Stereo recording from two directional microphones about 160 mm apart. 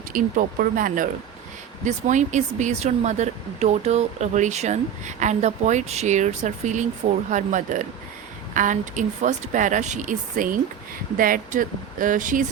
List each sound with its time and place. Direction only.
0.1 s speech: 60° right (ahead or behind)